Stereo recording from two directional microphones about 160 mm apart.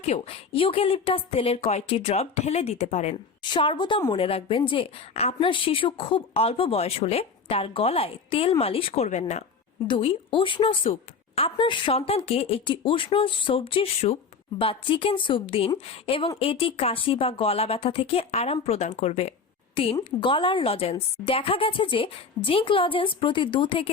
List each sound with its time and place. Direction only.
0.0 s a woman's voice: 40° left (ahead or behind)
3.4 s a woman's voice: 30° left (ahead or behind)
9.0 s speech: 45° left (ahead or behind)
9.8 s a woman's voice: 30° left (ahead or behind)